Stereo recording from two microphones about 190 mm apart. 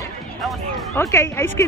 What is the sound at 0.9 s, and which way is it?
Speech, 15° left (ahead or behind).